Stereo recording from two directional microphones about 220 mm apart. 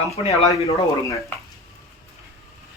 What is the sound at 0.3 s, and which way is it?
Speech, 30° left (ahead or behind).